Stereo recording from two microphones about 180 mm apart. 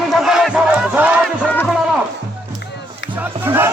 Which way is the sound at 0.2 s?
Centre (ahead or behind).